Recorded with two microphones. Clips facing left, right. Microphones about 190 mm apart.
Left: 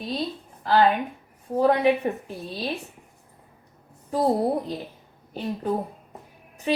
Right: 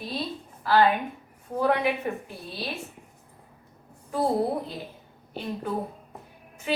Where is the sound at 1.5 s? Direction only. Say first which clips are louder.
Left 5 dB; 35° left (ahead or behind).